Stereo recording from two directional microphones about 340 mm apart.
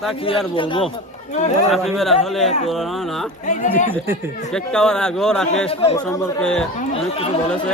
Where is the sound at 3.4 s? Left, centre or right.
Left.